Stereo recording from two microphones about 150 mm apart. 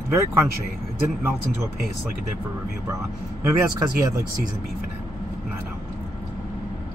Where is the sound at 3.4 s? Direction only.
20° right (ahead or behind).